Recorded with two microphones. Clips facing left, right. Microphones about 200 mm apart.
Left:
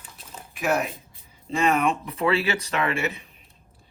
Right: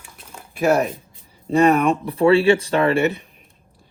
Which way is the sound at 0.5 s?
30° right (ahead or behind).